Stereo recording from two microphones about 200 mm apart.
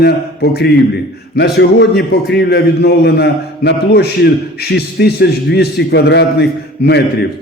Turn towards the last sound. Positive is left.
turn(degrees=55)  # may be behind; listen again after turning